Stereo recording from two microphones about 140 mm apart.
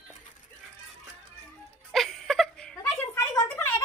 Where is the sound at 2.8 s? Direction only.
20° left (ahead or behind).